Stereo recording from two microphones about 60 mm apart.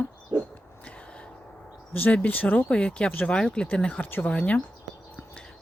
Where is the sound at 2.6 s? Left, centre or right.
Centre.